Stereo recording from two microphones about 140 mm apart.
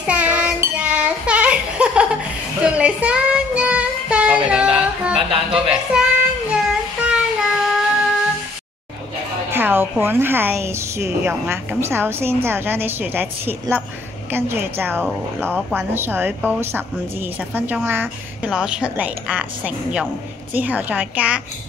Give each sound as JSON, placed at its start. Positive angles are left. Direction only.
{"t": 0.0, "sound": "child singing", "side_deg": -10}
{"t": 5.5, "sound": "a woman's voice", "side_deg": -5}
{"t": 6.5, "sound": "child singing", "side_deg": -5}
{"t": 9.5, "sound": "a woman's voice", "side_deg": -15}